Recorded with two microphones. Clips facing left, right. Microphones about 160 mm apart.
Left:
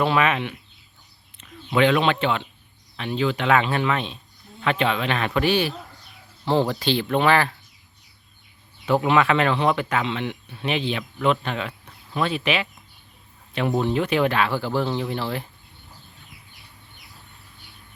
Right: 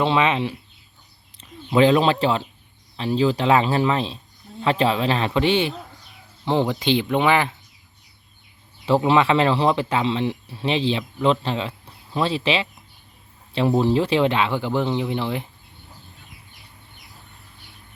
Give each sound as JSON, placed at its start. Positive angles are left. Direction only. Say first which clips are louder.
{"t": 0.0, "sound": "speech", "louder": "right 1 dB", "side_deg": -25}
{"t": 8.9, "sound": "speech", "louder": "right 2 dB", "side_deg": -30}